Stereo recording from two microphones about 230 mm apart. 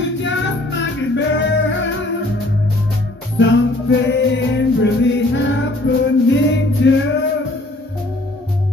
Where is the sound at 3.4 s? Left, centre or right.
Left.